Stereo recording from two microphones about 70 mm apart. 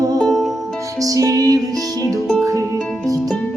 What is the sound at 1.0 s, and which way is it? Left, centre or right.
Music, right.